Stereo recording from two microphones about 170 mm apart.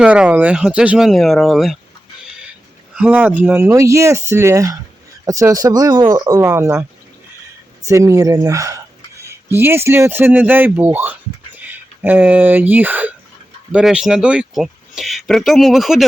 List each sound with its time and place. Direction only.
0.0 s speech: 5° right (ahead or behind)
2.9 s speech: 10° right (ahead or behind)
7.9 s speech: 20° right (ahead or behind); by 16.0 s centre (ahead or behind)